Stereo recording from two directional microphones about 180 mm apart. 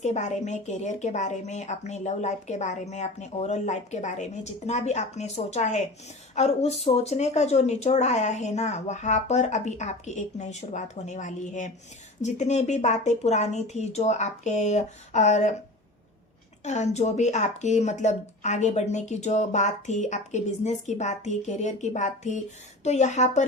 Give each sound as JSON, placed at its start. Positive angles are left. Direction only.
{"t": 0.0, "sound": "a woman's voice", "side_deg": 40}
{"t": 16.6, "sound": "a woman's voice", "side_deg": 40}